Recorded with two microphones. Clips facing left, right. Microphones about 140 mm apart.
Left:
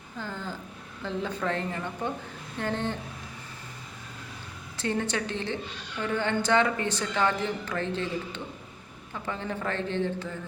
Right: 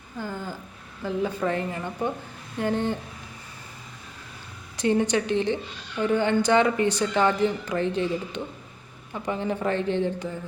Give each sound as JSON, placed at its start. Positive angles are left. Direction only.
{"t": 0.2, "sound": "a woman's voice", "side_deg": -10}
{"t": 4.8, "sound": "a woman's voice", "side_deg": -15}